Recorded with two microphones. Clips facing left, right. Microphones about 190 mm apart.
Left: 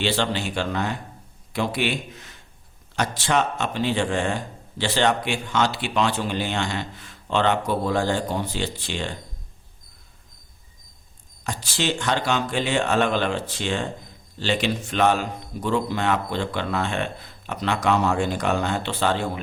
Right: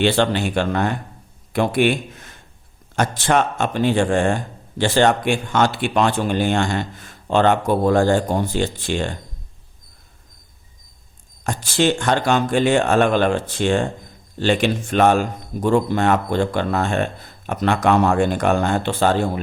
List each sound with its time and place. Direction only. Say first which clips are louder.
0.0 s a man's voice: right 6 dB; 55° right (ahead or behind)
11.4 s speech: right 7 dB; 50° right (ahead or behind)